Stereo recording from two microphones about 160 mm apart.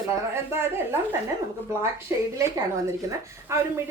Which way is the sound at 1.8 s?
20° right (ahead or behind).